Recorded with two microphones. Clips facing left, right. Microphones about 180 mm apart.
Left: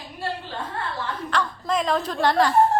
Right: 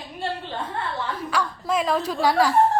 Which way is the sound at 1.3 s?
10° right (ahead or behind).